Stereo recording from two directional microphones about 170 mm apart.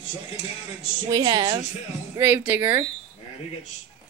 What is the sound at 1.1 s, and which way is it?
Speech, 25° right (ahead or behind).